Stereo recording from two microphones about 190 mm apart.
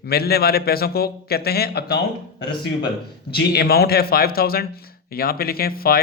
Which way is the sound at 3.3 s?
55° left (ahead or behind).